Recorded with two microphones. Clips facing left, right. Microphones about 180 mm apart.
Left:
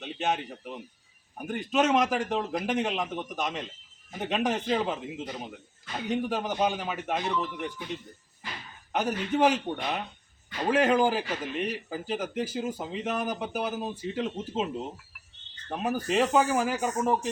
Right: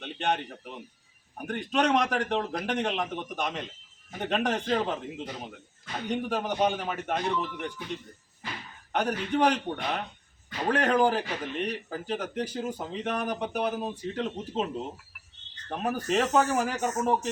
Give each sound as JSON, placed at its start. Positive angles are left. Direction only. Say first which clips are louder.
{"t": 0.0, "sound": "a man's voice", "louder": "even", "side_deg": 5}
{"t": 8.9, "sound": "a man's voice", "louder": "even", "side_deg": 5}
{"t": 15.7, "sound": "a man's voice", "louder": "even", "side_deg": 0}